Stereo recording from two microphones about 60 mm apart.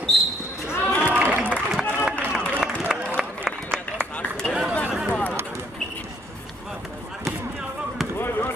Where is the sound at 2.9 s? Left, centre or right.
Centre.